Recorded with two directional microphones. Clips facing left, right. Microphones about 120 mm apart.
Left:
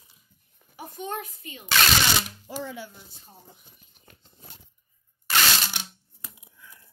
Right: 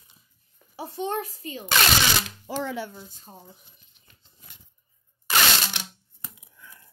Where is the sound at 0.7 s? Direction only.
35° right (ahead or behind).